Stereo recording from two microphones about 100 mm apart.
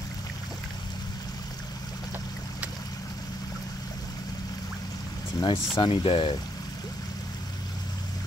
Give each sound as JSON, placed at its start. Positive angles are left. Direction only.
{"t": 5.4, "sound": "speech", "side_deg": 50}
{"t": 5.9, "sound": "speech", "side_deg": 65}